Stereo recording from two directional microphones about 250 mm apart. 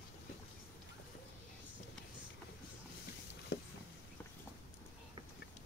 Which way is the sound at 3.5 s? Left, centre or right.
Left.